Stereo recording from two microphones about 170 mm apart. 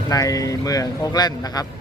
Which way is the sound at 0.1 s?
20° left (ahead or behind).